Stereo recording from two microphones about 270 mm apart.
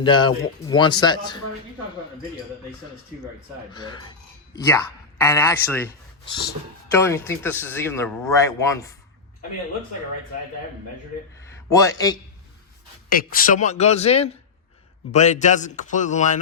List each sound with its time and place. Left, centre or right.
0.0 s a man's voice: centre
3.7 s a man's voice: centre
11.4 s speech: centre
13.1 s speech: left